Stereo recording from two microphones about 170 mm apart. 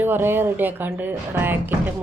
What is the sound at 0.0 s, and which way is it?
Speech, 15° right (ahead or behind).